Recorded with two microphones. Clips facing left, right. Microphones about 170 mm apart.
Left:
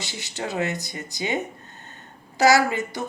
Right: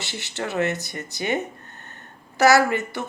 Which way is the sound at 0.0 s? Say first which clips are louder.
Right 1 dB; 15° left (ahead or behind).